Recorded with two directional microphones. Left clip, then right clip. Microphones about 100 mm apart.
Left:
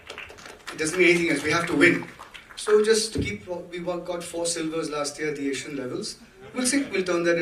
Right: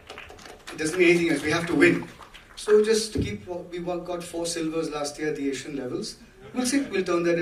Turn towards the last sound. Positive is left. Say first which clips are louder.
# left 1 dB
turn(degrees=20)  # may be behind; listen again after turning